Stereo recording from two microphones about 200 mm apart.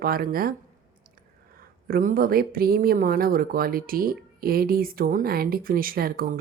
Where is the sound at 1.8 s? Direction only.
45° right (ahead or behind).